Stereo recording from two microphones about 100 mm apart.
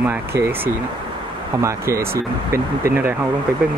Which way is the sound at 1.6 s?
30° right (ahead or behind).